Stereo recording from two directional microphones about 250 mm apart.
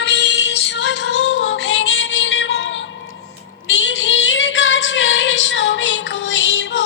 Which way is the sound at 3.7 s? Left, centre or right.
Left.